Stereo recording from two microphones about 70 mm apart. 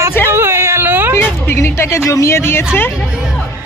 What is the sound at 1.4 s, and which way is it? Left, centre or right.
Speech, left.